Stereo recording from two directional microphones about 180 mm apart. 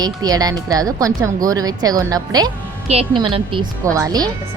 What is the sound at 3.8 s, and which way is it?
Speech, 15° right (ahead or behind).